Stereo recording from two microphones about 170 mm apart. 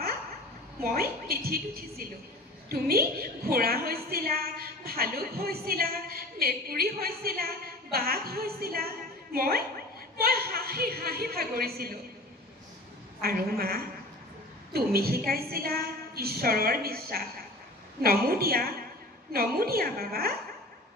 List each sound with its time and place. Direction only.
0.9 s a woman's voice: 65° right (ahead or behind)
13.2 s a woman's voice: 65° right (ahead or behind)